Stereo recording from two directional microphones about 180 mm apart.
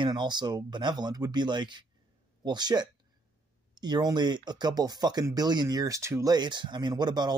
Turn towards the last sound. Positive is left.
turn(degrees=-25)  # may be behind; listen again after turning